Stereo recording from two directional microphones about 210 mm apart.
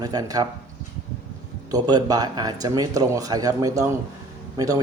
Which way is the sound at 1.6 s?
20° right (ahead or behind).